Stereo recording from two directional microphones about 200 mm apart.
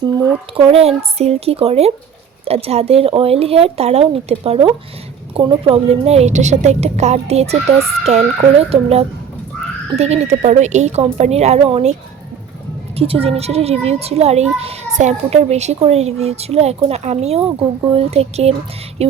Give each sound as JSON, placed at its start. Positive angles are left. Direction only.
{"t": 0.0, "sound": "speech", "side_deg": -25}
{"t": 13.0, "sound": "speech", "side_deg": -30}